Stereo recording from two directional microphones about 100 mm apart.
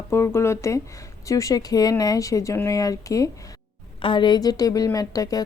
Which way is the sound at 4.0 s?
55° left (ahead or behind).